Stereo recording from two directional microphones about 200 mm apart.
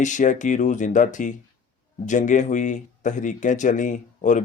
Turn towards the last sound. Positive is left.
turn(degrees=40)  # may be behind; listen again after turning